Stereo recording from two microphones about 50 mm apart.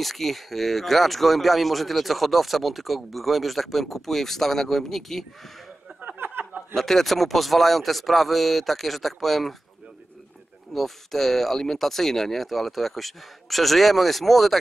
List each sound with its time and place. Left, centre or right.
0.0 s speech: centre
6.1 s a sound: right
6.7 s speech: centre
10.7 s speech: centre